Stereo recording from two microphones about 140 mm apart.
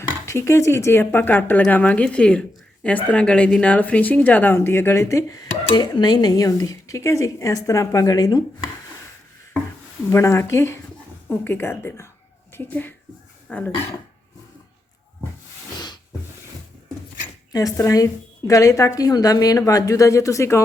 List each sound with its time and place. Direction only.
0.3 s speech: 20° left (ahead or behind)
10.1 s a woman's voice: 20° left (ahead or behind)
17.5 s speech: 25° left (ahead or behind)